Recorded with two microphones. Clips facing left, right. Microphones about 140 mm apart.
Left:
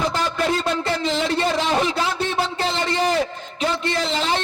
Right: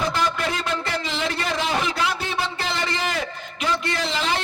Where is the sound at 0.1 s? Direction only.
35° left (ahead or behind).